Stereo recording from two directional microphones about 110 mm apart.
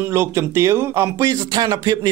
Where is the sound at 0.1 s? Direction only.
25° right (ahead or behind).